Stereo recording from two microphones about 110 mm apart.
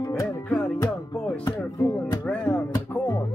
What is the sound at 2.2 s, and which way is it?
Music, 15° left (ahead or behind).